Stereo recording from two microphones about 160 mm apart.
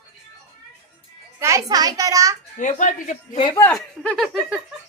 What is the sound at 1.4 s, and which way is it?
Speech, 20° right (ahead or behind).